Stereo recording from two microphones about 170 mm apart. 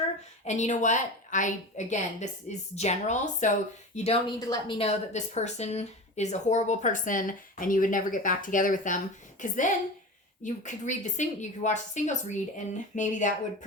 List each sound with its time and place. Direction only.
0.4 s speech: 45° left (ahead or behind)
4.3 s a woman's voice: 25° left (ahead or behind)
4.8 s speech: 40° left (ahead or behind)